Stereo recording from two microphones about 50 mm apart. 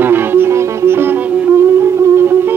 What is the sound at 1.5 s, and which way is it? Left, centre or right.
Music, right.